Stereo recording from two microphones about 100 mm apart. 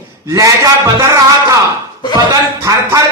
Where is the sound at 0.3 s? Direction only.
35° right (ahead or behind).